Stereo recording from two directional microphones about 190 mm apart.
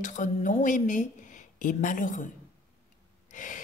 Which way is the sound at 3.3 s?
45° left (ahead or behind).